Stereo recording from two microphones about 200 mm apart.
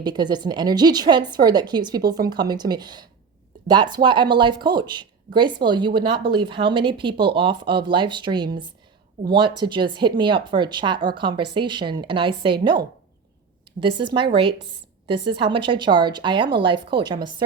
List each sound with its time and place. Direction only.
0.0 s speech: 20° right (ahead or behind)